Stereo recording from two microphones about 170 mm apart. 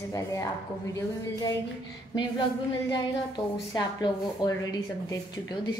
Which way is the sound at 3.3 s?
25° left (ahead or behind).